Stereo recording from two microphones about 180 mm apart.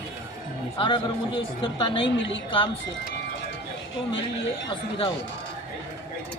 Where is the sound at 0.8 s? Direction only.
25° left (ahead or behind).